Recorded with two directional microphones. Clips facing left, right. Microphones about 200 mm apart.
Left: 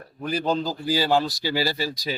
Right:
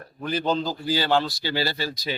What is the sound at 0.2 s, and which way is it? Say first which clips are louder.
A man's voice: even; centre (ahead or behind).